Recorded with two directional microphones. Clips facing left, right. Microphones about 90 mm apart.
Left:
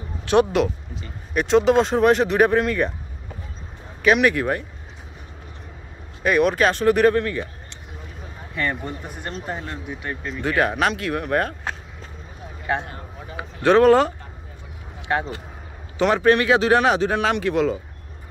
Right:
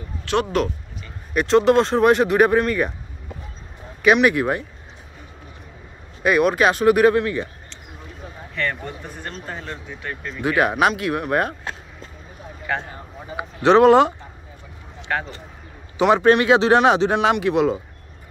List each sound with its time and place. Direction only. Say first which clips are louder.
0.2 s a sound: left 4 dB; 20° left (ahead or behind)
1.3 s speech: right 1 dB; centre (ahead or behind)
4.0 s speech: right 2 dB; 10° right (ahead or behind)
6.2 s speech: right 1 dB; 5° right (ahead or behind)
8.5 s speech: left 1 dB; 15° left (ahead or behind)
10.4 s speech: right 3 dB; 15° right (ahead or behind)
13.4 s speech: right 2 dB; 20° right (ahead or behind)
16.2 s speech: even; 25° right (ahead or behind)